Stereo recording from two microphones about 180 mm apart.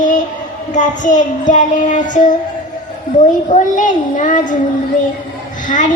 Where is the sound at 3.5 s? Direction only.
45° left (ahead or behind).